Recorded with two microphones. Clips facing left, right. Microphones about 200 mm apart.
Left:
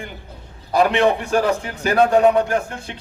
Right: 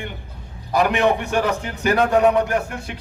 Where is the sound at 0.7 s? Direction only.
30° left (ahead or behind).